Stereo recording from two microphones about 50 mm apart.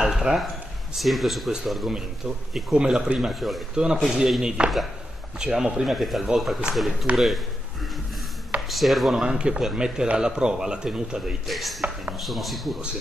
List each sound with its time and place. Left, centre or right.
0.0 s a sound: centre
0.9 s speech: centre
2.5 s a man's voice: centre
3.7 s a man's voice: centre
9.2 s a man's voice: centre
11.4 s speech: centre